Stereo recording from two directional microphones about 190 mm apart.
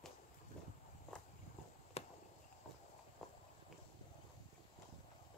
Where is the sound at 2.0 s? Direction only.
30° left (ahead or behind).